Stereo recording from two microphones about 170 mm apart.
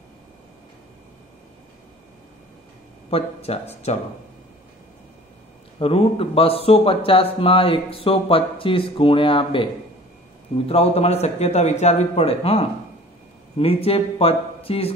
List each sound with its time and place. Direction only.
3.1 s speech: 35° left (ahead or behind)
5.8 s speech: 35° left (ahead or behind)
10.7 s speech: 35° left (ahead or behind)